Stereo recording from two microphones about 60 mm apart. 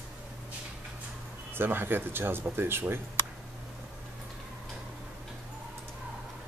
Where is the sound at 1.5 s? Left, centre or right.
Right.